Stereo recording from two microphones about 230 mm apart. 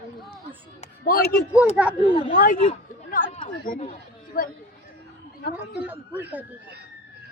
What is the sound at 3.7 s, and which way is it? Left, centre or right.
Speech, left.